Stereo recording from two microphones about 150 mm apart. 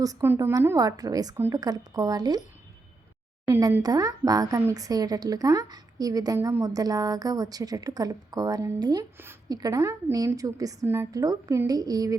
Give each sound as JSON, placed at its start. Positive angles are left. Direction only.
{"t": 0.0, "sound": "a woman's voice", "side_deg": -25}
{"t": 3.5, "sound": "a woman's voice", "side_deg": -15}